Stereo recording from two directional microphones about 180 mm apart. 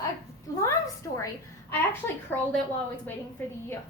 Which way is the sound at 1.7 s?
10° left (ahead or behind).